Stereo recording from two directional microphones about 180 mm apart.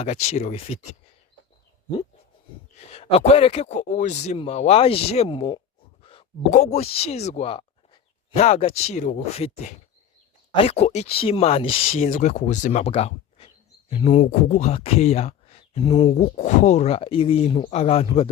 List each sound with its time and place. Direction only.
0.0 s speech: 40° left (ahead or behind)
2.9 s speech: 35° left (ahead or behind)
6.0 s a sound: 30° left (ahead or behind)
6.5 s speech: 40° left (ahead or behind)